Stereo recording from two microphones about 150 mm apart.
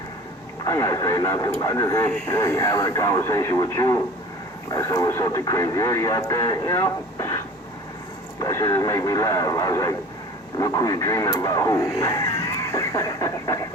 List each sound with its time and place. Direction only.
0.6 s speech: 25° left (ahead or behind)
8.4 s speech: 25° left (ahead or behind)